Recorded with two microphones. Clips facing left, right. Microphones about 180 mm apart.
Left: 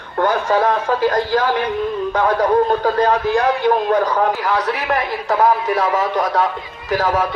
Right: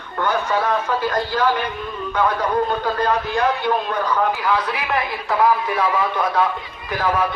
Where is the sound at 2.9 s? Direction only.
45° left (ahead or behind).